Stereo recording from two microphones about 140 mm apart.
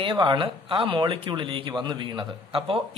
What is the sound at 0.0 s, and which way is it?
Speech, 35° right (ahead or behind).